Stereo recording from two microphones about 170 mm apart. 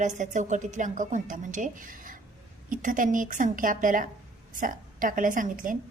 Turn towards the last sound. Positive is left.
turn(degrees=-50)  # may be behind; listen again after turning